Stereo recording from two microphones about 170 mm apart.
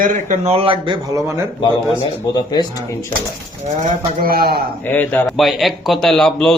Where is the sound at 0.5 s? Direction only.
30° right (ahead or behind).